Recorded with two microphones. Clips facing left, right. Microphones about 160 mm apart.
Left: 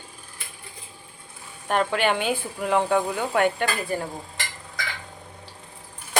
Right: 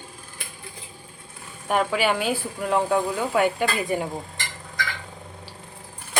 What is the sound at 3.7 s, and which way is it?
Speech, 15° right (ahead or behind).